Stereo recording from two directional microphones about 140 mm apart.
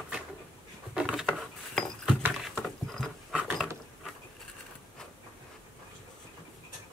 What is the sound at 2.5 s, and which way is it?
Patter, centre (ahead or behind).